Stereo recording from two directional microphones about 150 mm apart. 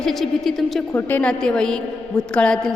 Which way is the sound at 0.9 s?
10° left (ahead or behind).